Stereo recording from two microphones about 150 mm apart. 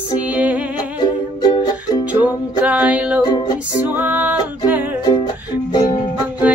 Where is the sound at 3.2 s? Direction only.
30° left (ahead or behind).